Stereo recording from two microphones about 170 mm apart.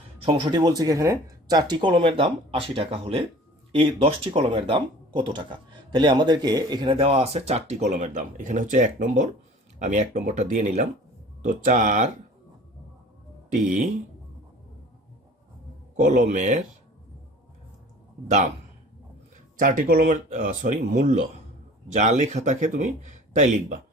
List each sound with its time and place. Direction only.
0.2 s speech: 30° right (ahead or behind); by 12.1 s 45° right (ahead or behind)
13.5 s speech: 50° right (ahead or behind)
16.0 s speech: 50° right (ahead or behind)
19.5 s speech: 55° right (ahead or behind)